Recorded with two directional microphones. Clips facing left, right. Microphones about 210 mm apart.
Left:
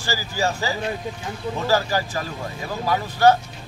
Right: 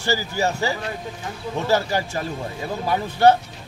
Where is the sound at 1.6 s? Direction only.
25° right (ahead or behind).